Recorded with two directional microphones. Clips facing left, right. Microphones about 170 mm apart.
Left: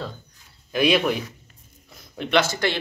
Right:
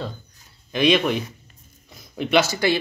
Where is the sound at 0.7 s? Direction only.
5° left (ahead or behind).